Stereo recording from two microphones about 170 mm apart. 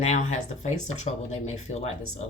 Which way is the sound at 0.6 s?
40° left (ahead or behind).